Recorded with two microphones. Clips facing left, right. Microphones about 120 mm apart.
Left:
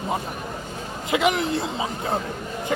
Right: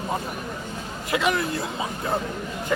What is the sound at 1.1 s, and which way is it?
Speech, 20° left (ahead or behind).